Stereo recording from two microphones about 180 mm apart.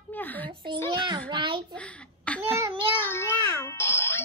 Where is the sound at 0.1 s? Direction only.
10° left (ahead or behind).